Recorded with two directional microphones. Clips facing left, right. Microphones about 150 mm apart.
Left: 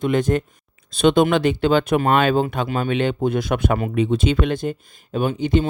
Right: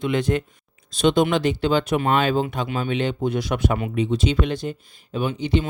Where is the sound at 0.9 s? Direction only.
60° left (ahead or behind).